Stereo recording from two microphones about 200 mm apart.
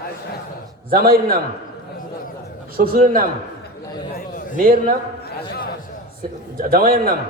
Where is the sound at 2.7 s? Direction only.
45° right (ahead or behind).